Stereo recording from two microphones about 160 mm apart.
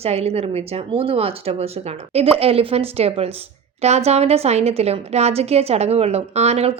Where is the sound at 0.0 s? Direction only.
40° right (ahead or behind).